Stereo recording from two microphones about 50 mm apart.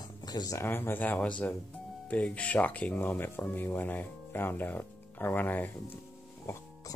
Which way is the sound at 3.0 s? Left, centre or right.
Left.